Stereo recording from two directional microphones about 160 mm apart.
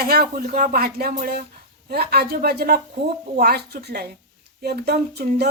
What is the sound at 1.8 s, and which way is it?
Speech, 75° right (ahead or behind).